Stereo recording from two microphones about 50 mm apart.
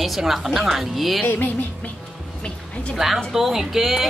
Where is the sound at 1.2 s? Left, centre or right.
Left.